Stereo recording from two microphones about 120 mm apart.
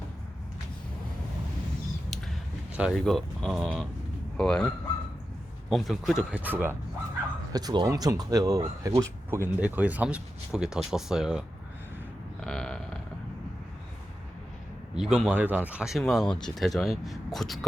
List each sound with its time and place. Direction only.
2.1 s a sound: centre (ahead or behind)
3.0 s speech: 5° left (ahead or behind); by 6.7 s 15° right (ahead or behind)
7.5 s speech: 35° right (ahead or behind)
9.6 s speech: 15° right (ahead or behind)
12.4 s a sound: 5° left (ahead or behind)
14.9 s speech: 5° right (ahead or behind)